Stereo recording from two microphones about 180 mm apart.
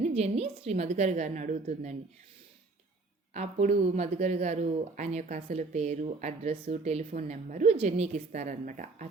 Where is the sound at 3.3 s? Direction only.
40° right (ahead or behind).